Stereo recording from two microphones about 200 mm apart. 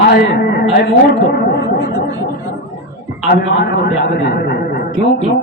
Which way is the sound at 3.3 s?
55° left (ahead or behind).